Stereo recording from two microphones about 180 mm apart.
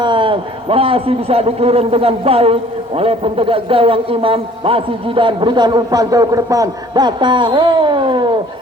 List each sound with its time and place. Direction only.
0.0 s a man's voice: 25° right (ahead or behind)